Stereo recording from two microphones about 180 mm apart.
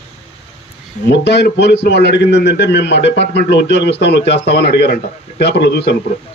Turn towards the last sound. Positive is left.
turn(degrees=65)  # may be behind; listen again after turning